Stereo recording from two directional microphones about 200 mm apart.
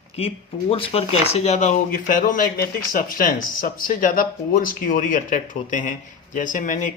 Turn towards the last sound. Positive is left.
turn(degrees=40)  # may be behind; listen again after turning